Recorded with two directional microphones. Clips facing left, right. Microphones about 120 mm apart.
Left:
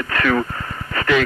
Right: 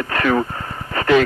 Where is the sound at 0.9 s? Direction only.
30° right (ahead or behind).